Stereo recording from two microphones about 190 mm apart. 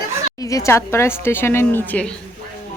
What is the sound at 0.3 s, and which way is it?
A woman's voice, 15° left (ahead or behind).